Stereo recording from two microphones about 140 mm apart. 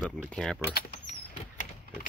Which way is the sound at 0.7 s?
80° left.